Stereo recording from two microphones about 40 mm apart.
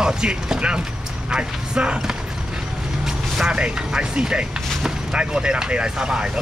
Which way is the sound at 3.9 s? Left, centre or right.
Right.